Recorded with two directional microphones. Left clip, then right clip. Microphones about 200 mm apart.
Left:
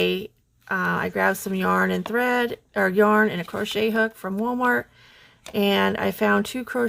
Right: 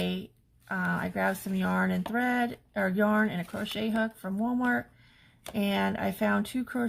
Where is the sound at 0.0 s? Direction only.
40° left (ahead or behind).